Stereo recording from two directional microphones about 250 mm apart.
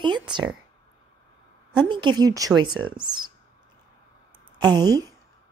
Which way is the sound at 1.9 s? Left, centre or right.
Centre.